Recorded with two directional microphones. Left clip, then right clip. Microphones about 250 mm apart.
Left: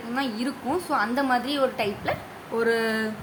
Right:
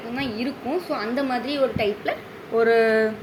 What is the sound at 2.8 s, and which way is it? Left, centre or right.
Speech, left.